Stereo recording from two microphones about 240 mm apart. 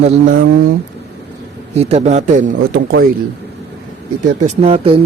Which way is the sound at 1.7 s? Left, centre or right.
Right.